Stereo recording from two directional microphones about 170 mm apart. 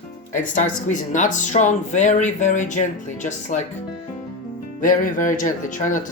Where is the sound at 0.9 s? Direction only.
45° left (ahead or behind).